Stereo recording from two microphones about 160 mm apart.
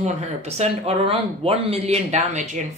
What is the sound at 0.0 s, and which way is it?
Speech, 40° right (ahead or behind).